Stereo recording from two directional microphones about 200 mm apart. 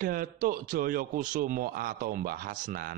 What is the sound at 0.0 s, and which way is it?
Speech, 45° right (ahead or behind).